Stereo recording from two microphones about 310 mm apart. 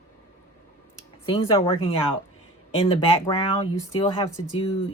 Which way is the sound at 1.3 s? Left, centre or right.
Centre.